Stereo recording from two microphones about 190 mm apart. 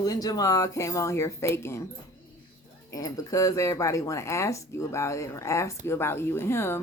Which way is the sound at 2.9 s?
20° left (ahead or behind).